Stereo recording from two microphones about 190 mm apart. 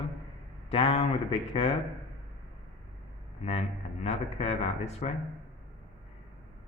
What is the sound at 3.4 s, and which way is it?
Speech, 35° left (ahead or behind).